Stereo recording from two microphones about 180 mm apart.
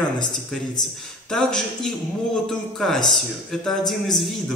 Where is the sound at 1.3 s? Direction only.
5° left (ahead or behind).